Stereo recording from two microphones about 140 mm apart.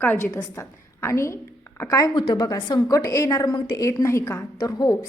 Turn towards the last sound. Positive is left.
turn(degrees=25)  # may be behind; listen again after turning